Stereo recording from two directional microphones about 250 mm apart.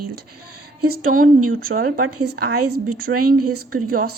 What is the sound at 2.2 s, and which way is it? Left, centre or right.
Speech, right.